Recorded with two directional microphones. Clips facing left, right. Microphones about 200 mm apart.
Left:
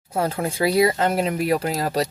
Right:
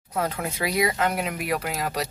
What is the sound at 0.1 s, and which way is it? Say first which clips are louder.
Speech: left 4 dB; 30° left (ahead or behind).